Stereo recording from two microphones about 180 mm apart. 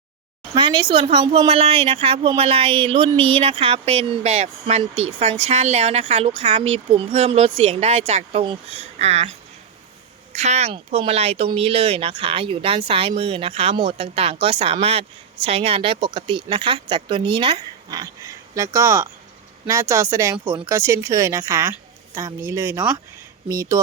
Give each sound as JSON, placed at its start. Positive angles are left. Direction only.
{"t": 0.5, "sound": "speech", "side_deg": -25}
{"t": 10.3, "sound": "a woman's voice", "side_deg": -40}